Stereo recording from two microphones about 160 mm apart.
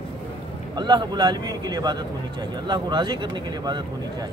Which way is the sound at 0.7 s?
30° right (ahead or behind).